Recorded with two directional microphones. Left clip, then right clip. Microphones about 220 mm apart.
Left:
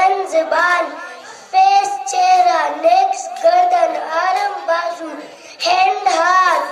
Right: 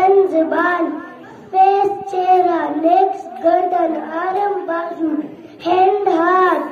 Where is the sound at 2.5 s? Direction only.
30° left (ahead or behind).